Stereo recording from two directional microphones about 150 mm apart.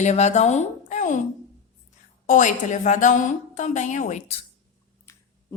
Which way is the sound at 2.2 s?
55° left (ahead or behind).